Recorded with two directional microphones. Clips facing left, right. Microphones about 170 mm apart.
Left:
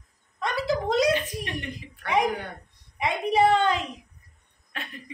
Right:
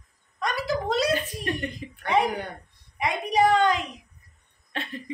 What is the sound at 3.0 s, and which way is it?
Speech, 25° left (ahead or behind).